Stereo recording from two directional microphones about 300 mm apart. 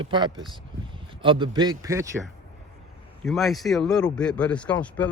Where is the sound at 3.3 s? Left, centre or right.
Centre.